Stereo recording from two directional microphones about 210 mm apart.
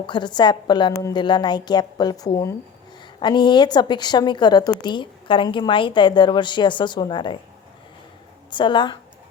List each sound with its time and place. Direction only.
0.0 s a woman's voice: 20° left (ahead or behind)
8.4 s a woman's voice: 20° left (ahead or behind)